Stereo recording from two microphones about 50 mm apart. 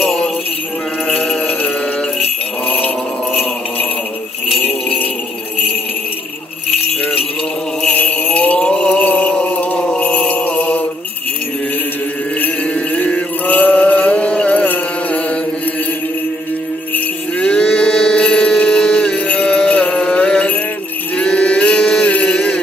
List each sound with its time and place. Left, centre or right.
1.0 s music: centre
4.6 s jingle bell: left
7.9 s a sound: left
8.9 s music: left
12.6 s chant: left
16.9 s music: left
21.2 s chant: left